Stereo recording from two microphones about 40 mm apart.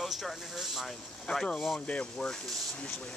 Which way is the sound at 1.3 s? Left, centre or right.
Centre.